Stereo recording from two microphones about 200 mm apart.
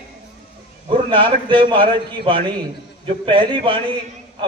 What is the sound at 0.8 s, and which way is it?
A man's voice, 25° right (ahead or behind).